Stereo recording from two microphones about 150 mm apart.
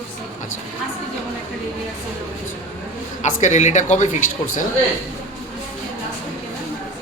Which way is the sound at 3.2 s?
55° left (ahead or behind).